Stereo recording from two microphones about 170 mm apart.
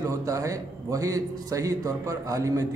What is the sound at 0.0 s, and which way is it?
A man's voice, 20° right (ahead or behind).